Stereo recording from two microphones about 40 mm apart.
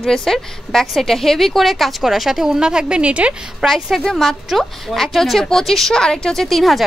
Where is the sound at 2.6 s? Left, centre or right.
Centre.